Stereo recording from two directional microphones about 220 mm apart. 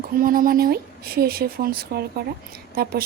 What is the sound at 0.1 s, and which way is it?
Speech, 40° right (ahead or behind).